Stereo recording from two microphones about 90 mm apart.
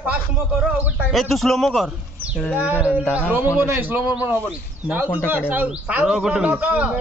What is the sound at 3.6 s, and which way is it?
A man's voice, 20° right (ahead or behind).